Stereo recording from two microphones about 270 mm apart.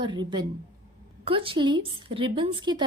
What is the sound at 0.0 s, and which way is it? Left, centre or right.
A woman's voice, centre.